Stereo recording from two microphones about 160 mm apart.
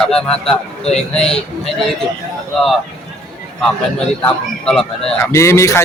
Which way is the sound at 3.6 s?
5° left (ahead or behind).